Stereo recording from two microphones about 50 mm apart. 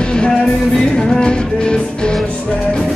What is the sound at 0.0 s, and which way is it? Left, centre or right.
Music, centre.